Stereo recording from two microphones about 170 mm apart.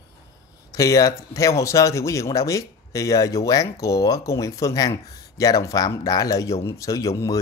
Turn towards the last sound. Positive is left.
turn(degrees=20)  # may be behind; listen again after turning